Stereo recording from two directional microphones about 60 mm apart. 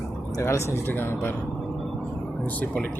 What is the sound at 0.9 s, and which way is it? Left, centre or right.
Speech, left.